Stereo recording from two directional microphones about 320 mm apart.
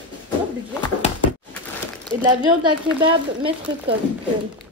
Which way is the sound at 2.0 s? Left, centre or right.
Centre.